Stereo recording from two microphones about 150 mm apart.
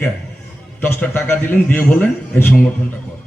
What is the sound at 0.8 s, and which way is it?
A man's voice, 10° left (ahead or behind).